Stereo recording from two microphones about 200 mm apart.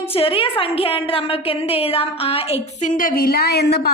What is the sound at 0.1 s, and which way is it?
A woman's voice, 25° left (ahead or behind).